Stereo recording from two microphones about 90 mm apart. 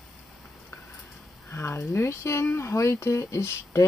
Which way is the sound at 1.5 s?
25° left (ahead or behind).